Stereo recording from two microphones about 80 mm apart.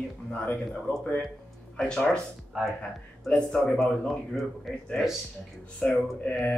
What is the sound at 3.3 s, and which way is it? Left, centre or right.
Speech, centre.